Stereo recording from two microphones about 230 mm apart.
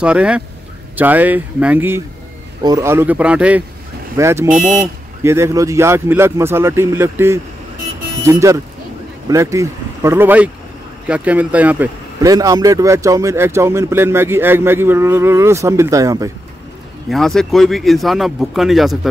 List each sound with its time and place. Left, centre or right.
0.0 s speech: centre
4.5 s speech: right
5.2 s speech: centre
17.1 s speech: centre